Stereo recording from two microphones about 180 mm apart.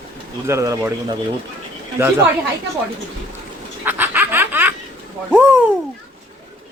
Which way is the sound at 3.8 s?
10° right (ahead or behind).